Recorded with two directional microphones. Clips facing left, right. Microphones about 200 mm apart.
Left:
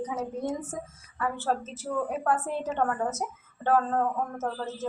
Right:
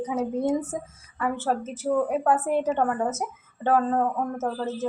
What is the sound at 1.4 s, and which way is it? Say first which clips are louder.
Speech: right 5 dB; 15° right (ahead or behind).